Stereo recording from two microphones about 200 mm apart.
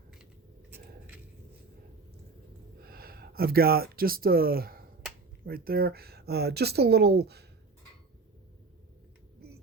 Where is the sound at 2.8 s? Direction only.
50° right (ahead or behind).